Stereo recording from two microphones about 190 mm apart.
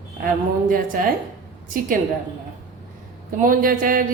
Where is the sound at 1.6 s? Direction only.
45° right (ahead or behind).